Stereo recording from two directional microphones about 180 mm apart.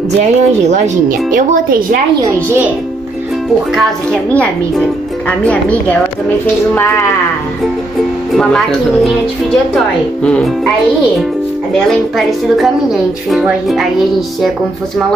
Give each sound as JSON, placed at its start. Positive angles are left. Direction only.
{"t": 0.2, "sound": "speech", "side_deg": -40}
{"t": 2.2, "sound": "speech", "side_deg": -15}
{"t": 3.7, "sound": "a woman's voice", "side_deg": 5}
{"t": 8.3, "sound": "a woman's voice", "side_deg": 0}
{"t": 10.2, "sound": "a woman's voice", "side_deg": 5}
{"t": 11.9, "sound": "a woman's voice", "side_deg": 0}